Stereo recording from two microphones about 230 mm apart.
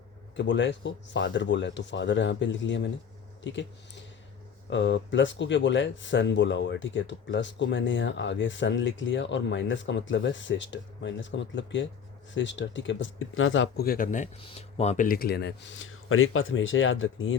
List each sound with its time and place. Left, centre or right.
0.3 s speech: left
4.7 s speech: left